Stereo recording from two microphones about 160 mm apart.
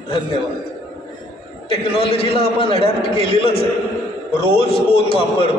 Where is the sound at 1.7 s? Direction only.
35° left (ahead or behind).